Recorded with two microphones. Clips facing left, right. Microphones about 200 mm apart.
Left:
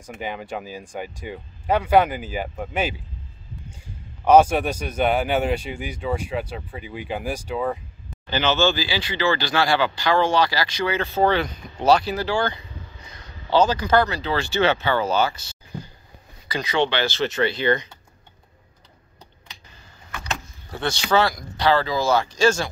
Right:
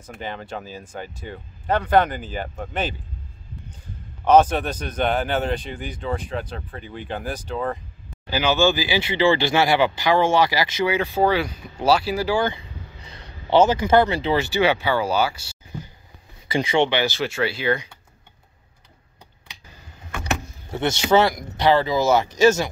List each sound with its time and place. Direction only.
0.0 s speech: 10° left (ahead or behind)
4.2 s speech: 10° left (ahead or behind)
8.3 s speech: 10° right (ahead or behind)
16.4 s speech: 25° right (ahead or behind); by 17.8 s 5° right (ahead or behind)
20.7 s speech: 20° right (ahead or behind)